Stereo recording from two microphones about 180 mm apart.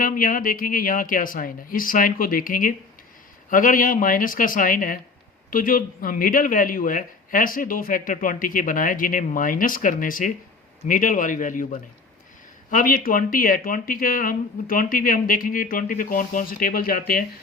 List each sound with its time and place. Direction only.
0.0 s a man's voice: 50° left (ahead or behind)